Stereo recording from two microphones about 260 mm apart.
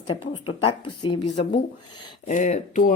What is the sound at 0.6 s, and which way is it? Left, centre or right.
Speech, centre.